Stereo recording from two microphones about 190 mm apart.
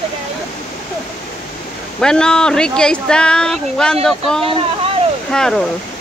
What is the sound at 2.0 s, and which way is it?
Speech, 5° left (ahead or behind).